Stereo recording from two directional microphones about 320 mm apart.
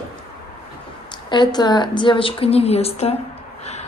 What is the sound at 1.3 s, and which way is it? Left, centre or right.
Speech, centre.